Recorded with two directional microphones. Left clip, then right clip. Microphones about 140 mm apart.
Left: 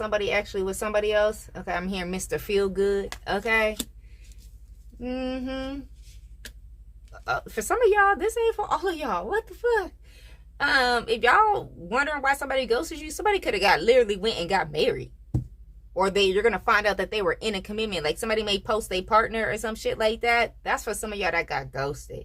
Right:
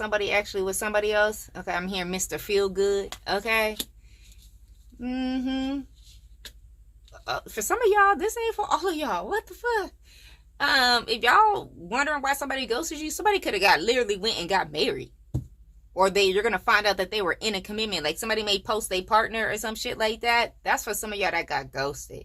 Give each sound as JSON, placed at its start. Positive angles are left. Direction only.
{"t": 0.0, "sound": "a woman's voice", "side_deg": -40}
{"t": 4.9, "sound": "a woman's voice", "side_deg": -35}
{"t": 7.1, "sound": "a woman's voice", "side_deg": -30}